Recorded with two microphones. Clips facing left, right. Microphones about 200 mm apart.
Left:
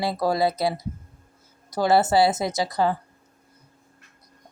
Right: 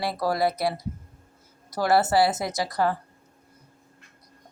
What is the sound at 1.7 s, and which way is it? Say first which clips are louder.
Speech: left 2 dB; 20° left (ahead or behind).